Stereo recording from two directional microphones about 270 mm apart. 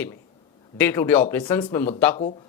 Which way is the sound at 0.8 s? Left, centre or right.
Centre.